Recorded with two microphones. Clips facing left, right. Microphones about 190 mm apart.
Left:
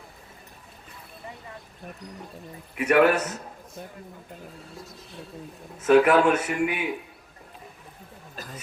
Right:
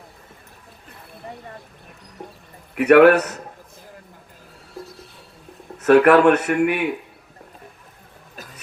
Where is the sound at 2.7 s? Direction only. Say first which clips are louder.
Right 8 dB; 65° right (ahead or behind).